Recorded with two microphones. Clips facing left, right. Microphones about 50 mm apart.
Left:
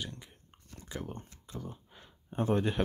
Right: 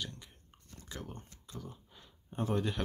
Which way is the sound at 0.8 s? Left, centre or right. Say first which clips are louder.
Left 5 dB; centre.